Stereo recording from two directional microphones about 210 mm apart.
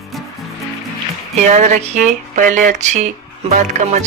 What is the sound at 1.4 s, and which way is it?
Speech, 35° right (ahead or behind).